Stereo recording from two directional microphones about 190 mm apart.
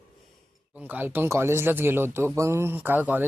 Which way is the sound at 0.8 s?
10° right (ahead or behind).